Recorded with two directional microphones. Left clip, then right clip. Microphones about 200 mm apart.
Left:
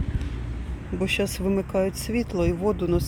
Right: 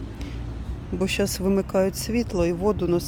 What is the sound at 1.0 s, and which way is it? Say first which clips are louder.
Speech: right 1 dB; 10° right (ahead or behind).